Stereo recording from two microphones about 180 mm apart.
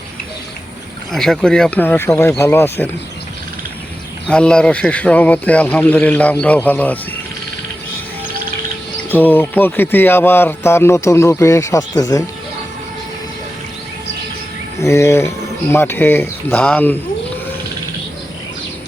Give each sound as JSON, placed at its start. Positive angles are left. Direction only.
{"t": 1.1, "sound": "speech", "side_deg": 0}
{"t": 4.3, "sound": "speech", "side_deg": 5}
{"t": 9.0, "sound": "speech", "side_deg": 10}
{"t": 14.8, "sound": "speech", "side_deg": 15}